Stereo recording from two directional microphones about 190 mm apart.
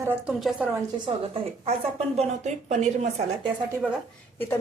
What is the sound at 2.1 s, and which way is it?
A woman's voice, 35° right (ahead or behind).